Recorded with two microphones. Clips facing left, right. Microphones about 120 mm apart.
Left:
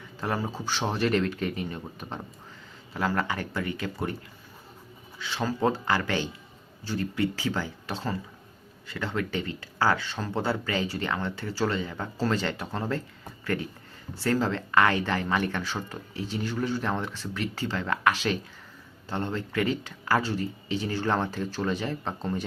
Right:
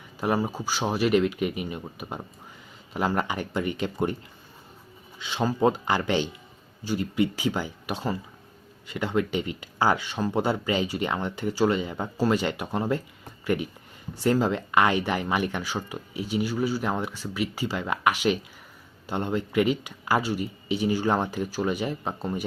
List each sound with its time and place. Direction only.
0.2 s speech: 15° right (ahead or behind)
5.2 s speech: 15° right (ahead or behind)